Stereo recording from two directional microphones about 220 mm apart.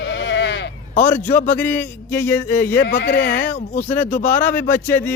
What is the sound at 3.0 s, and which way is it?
Speech, 50° left (ahead or behind).